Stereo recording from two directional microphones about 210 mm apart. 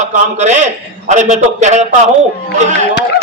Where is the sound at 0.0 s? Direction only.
35° right (ahead or behind).